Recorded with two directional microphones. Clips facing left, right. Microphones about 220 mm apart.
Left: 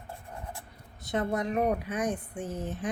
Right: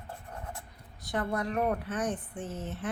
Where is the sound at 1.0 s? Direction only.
20° left (ahead or behind).